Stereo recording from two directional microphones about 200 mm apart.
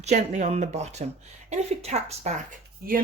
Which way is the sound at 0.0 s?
35° right (ahead or behind).